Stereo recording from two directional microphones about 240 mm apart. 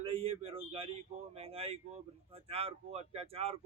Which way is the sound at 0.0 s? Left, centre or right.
Right.